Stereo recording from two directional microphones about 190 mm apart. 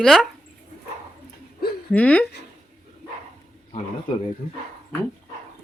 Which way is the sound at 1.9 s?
5° left (ahead or behind).